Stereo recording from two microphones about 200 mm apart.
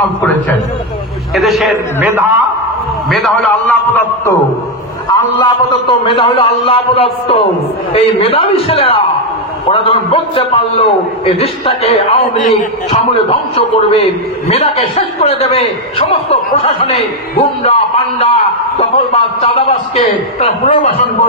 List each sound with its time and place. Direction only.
1.3 s a man's voice: centre (ahead or behind)
3.1 s a man's voice: centre (ahead or behind)
5.1 s a man's voice: 25° left (ahead or behind)